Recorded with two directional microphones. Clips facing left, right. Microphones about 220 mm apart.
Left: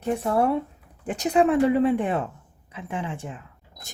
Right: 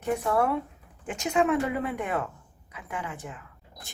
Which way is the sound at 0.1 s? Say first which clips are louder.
Left 3 dB; 30° left (ahead or behind).